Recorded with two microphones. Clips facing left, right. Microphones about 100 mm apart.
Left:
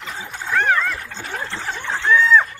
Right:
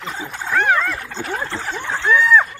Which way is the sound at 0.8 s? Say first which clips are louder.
Right 2 dB; centre (ahead or behind).